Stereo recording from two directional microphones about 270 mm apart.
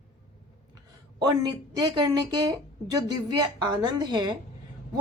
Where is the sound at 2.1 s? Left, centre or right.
Centre.